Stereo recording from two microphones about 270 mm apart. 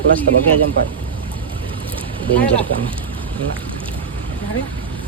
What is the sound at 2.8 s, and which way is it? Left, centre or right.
Speech, centre.